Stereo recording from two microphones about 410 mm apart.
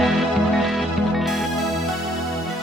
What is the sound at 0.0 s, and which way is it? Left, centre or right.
Music, centre.